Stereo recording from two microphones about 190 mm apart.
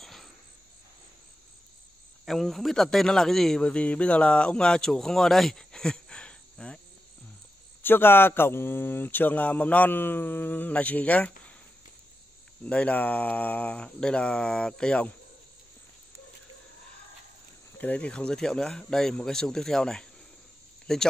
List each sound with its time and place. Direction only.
0.0 s cricket: centre (ahead or behind)
2.2 s speech: centre (ahead or behind)
7.8 s speech: 10° left (ahead or behind)
12.6 s speech: 5° left (ahead or behind)
17.7 s speech: 10° left (ahead or behind)